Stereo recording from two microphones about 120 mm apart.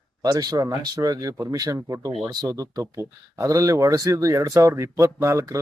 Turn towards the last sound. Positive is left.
turn(degrees=-25)  # may be behind; listen again after turning